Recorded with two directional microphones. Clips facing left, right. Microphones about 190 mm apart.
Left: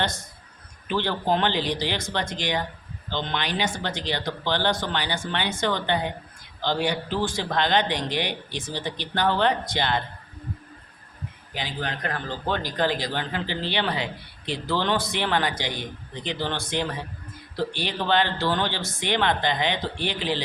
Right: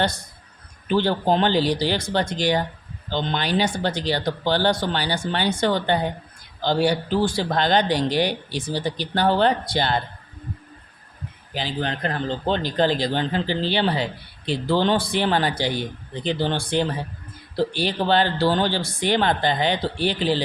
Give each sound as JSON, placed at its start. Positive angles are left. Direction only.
{"t": 0.9, "sound": "speech", "side_deg": -35}
{"t": 11.5, "sound": "speech", "side_deg": -30}